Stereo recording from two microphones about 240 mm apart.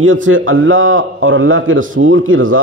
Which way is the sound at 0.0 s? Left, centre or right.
Right.